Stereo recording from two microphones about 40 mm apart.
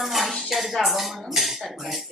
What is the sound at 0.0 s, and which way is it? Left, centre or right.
Dishes, centre.